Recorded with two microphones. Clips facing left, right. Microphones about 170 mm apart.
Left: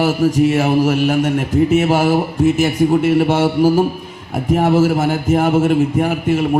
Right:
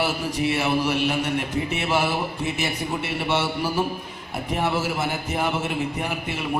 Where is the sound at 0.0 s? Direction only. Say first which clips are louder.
Left 11 dB; 45° left (ahead or behind).